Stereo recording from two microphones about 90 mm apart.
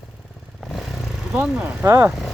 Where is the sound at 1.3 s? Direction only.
15° right (ahead or behind).